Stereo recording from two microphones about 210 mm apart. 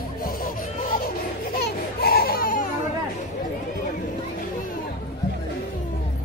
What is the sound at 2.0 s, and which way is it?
Baby cry, 45° left (ahead or behind).